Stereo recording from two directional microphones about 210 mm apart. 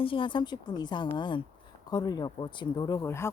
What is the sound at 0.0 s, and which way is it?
Speech, 25° left (ahead or behind).